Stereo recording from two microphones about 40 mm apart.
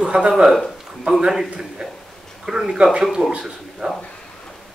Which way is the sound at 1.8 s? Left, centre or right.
Centre.